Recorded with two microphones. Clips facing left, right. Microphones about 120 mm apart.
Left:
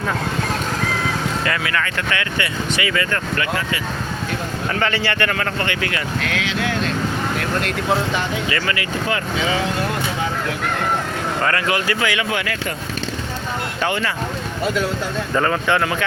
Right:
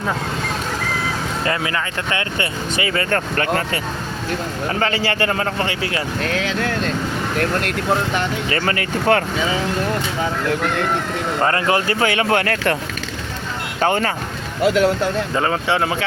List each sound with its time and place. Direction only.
1.5 s speech: 25° right (ahead or behind)
5.0 s speech: 30° right (ahead or behind)
8.4 s speech: 40° right (ahead or behind)
11.4 s speech: 30° right (ahead or behind)
13.8 s speech: 40° right (ahead or behind)
14.6 s speech: 70° right (ahead or behind)
15.4 s speech: 25° right (ahead or behind)